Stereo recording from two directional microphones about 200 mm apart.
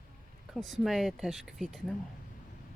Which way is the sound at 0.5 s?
Centre (ahead or behind).